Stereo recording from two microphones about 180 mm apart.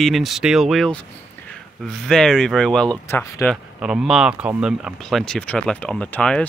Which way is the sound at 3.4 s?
Centre (ahead or behind).